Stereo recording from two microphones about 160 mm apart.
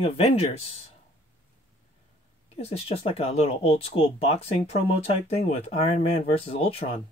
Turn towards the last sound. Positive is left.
turn(degrees=40)  # may be behind; listen again after turning